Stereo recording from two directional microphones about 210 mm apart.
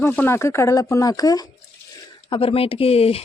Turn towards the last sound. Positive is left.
turn(degrees=30)  # may be behind; listen again after turning